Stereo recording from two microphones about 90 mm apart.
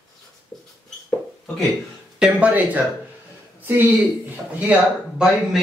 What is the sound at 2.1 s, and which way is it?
Speech, 10° right (ahead or behind).